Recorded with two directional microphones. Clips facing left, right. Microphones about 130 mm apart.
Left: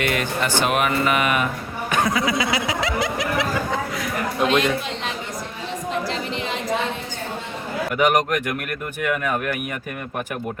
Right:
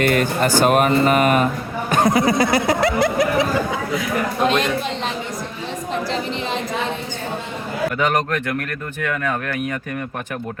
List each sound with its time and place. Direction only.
0.0 s speech: 40° right (ahead or behind)
1.9 s snicker: 40° right (ahead or behind)
3.9 s a man's voice: centre (ahead or behind)
7.9 s speech: 15° left (ahead or behind)